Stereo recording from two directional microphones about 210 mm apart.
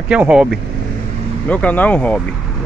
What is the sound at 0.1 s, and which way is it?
Speech, 5° right (ahead or behind).